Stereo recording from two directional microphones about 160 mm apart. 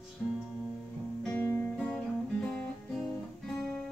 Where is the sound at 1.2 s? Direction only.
10° left (ahead or behind).